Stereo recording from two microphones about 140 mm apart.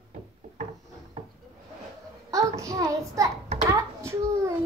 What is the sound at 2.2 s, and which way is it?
Child singing, 25° right (ahead or behind).